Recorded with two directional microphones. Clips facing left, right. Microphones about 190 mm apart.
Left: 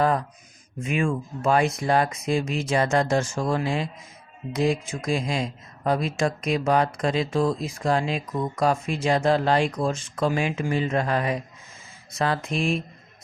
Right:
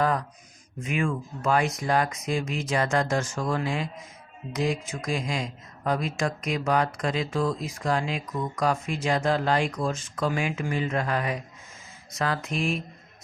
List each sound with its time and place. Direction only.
0.8 s speech: 25° left (ahead or behind)